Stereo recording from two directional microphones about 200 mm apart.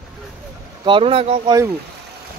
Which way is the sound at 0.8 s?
25° right (ahead or behind).